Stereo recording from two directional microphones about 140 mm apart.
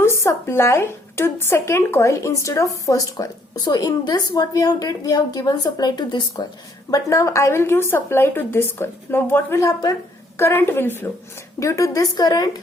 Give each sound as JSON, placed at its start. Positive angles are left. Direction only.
{"t": 0.0, "sound": "a woman's voice", "side_deg": 20}